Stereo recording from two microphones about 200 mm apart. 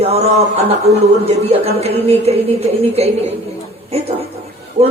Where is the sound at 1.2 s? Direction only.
30° right (ahead or behind).